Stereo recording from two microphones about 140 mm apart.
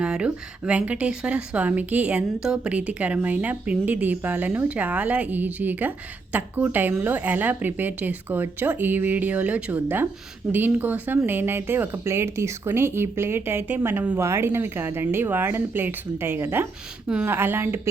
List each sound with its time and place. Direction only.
0.0 s a woman's voice: 5° right (ahead or behind)